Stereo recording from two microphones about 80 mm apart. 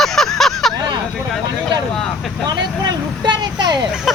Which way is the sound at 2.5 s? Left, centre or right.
Right.